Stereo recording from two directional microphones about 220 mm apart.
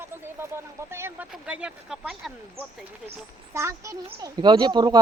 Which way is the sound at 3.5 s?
10° right (ahead or behind).